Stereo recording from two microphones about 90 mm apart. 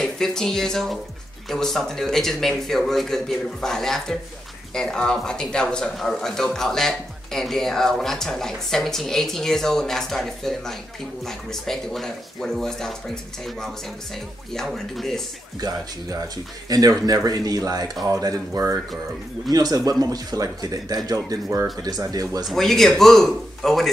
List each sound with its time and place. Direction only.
0.0 s speech: 5° left (ahead or behind)
15.6 s speech: 50° right (ahead or behind)
22.5 s speech: centre (ahead or behind)